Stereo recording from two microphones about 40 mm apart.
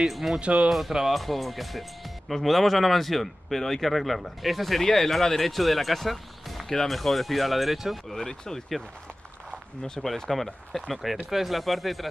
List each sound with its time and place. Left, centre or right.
0.1 s speech: centre
0.4 s speech: right
0.7 s speech: centre
8.3 s speech: centre
10.0 s speech: centre